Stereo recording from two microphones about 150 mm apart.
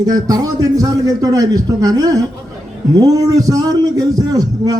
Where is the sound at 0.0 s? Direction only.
25° right (ahead or behind).